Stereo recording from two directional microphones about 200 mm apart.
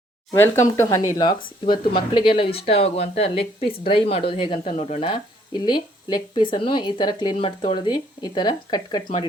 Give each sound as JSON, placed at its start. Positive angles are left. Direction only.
{"t": 0.3, "sound": "speech", "side_deg": 10}